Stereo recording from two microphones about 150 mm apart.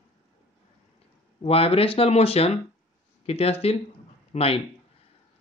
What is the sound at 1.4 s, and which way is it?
Speech, 40° left (ahead or behind).